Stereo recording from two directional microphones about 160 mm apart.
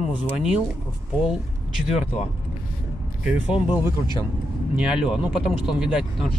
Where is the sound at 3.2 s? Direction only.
10° right (ahead or behind).